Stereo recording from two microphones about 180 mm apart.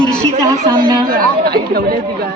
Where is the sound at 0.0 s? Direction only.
25° right (ahead or behind).